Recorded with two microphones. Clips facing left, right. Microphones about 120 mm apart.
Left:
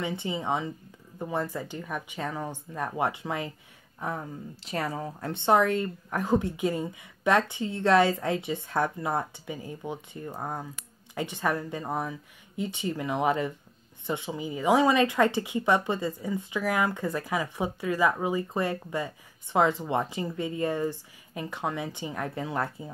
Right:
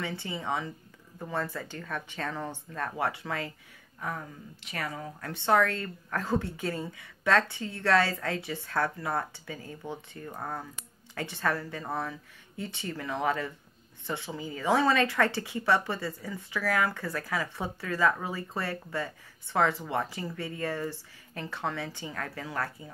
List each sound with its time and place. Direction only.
0.0 s a woman's voice: 20° left (ahead or behind)